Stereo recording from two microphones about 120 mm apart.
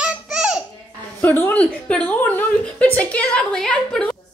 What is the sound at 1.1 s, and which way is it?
A woman's voice, 20° left (ahead or behind).